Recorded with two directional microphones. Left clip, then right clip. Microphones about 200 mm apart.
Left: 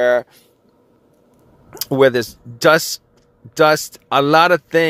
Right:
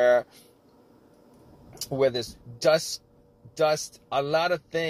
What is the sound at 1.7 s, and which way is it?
Speech, 55° left (ahead or behind).